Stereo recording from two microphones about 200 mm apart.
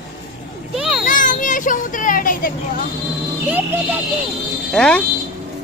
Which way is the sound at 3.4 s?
10° right (ahead or behind).